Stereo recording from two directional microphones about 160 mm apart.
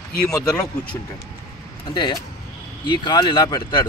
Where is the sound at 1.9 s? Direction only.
30° left (ahead or behind).